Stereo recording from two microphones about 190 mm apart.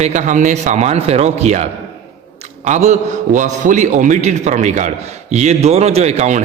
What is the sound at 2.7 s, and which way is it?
Speech, 35° right (ahead or behind).